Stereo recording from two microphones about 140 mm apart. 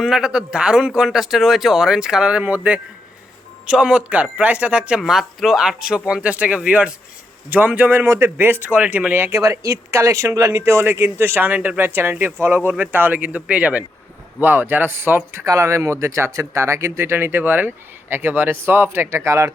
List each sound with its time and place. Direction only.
0.0 s speech: 5° right (ahead or behind); by 19.5 s 20° right (ahead or behind)